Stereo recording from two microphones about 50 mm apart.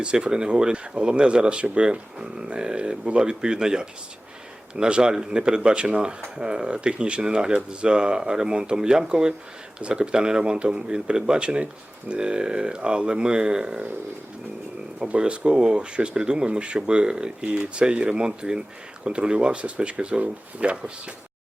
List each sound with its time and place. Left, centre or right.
0.0 s speech: centre
14.9 s speech: right